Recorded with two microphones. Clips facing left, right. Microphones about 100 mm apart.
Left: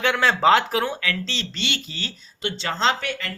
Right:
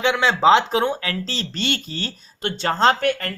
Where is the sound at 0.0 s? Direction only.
20° right (ahead or behind).